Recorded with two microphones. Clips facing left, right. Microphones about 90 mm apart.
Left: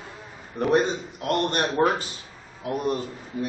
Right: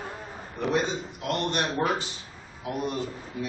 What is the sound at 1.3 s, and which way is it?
Speech, 45° left (ahead or behind).